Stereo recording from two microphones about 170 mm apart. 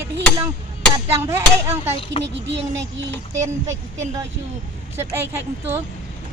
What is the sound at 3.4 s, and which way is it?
Speech, 15° right (ahead or behind).